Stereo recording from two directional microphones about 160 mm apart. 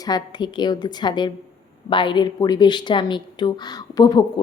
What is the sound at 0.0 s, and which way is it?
Speech, 25° left (ahead or behind).